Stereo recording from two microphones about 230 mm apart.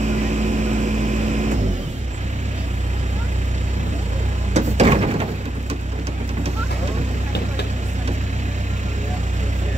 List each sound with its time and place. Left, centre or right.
0.0 s vehicle: right
4.6 s printer: right